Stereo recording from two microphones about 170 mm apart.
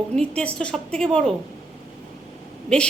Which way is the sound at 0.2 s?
5° left (ahead or behind).